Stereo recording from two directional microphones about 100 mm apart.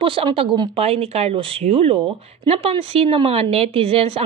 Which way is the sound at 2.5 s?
70° right (ahead or behind).